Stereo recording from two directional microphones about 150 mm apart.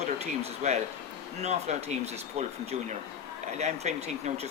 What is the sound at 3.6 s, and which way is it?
Speech, 50° right (ahead or behind).